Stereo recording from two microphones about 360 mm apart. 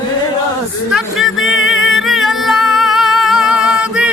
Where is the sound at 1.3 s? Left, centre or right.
Left.